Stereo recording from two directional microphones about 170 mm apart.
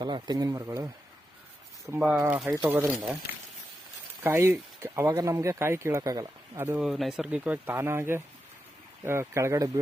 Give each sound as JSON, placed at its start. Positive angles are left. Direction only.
{"t": 0.0, "sound": "speech", "side_deg": -25}
{"t": 2.1, "sound": "speech", "side_deg": -15}
{"t": 2.7, "sound": "speech", "side_deg": -10}
{"t": 4.2, "sound": "speech", "side_deg": -15}